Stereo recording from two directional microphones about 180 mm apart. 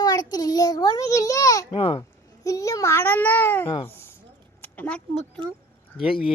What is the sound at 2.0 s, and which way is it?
A child's voice, 15° left (ahead or behind).